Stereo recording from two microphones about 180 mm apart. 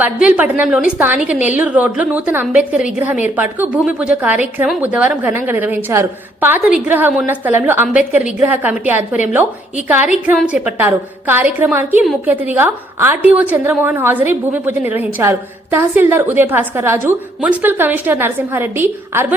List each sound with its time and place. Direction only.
0.0 s a woman's voice: 10° right (ahead or behind)